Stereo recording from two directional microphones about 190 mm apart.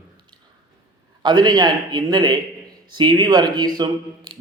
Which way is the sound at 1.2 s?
25° right (ahead or behind).